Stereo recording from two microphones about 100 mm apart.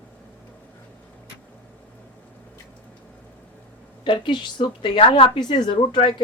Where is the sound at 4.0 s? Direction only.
50° left (ahead or behind).